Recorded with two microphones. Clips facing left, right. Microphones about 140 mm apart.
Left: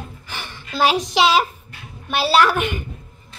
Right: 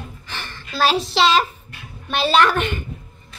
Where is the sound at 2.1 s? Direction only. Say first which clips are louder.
Even; 5° left (ahead or behind).